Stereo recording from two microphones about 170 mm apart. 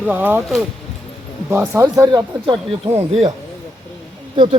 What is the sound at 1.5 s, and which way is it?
Speech, 15° right (ahead or behind).